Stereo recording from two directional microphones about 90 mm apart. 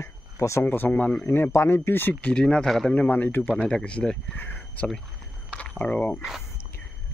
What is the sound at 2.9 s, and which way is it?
Speech, 20° left (ahead or behind).